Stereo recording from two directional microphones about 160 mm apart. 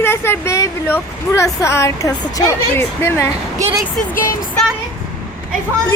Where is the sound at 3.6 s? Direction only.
20° right (ahead or behind).